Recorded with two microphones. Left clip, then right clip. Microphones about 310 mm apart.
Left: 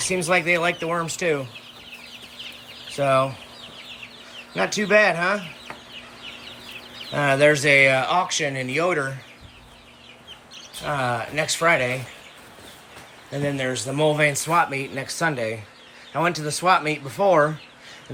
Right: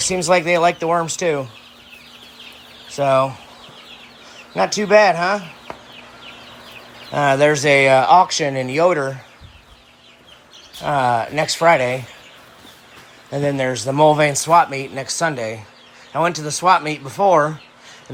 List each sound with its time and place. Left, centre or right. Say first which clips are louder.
0.1 s speech: right 4 dB; centre
2.9 s speech: right 4 dB; centre
4.5 s speech: right 5 dB; centre
7.1 s speech: right 3 dB; centre
10.8 s speech: right 8 dB; centre
13.3 s speech: right 6 dB; centre